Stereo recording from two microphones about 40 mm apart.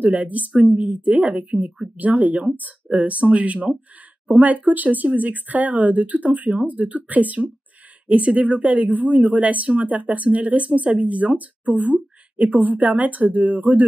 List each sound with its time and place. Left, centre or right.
0.0 s speech: right